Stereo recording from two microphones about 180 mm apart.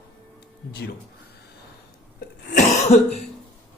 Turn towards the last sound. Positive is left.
turn(degrees=40)  # may be behind; listen again after turning